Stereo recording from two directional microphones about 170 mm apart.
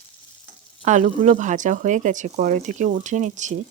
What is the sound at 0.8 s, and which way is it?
Speech, 45° right (ahead or behind).